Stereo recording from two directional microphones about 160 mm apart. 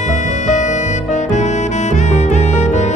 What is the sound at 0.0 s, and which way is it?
Saxophone, 50° left (ahead or behind).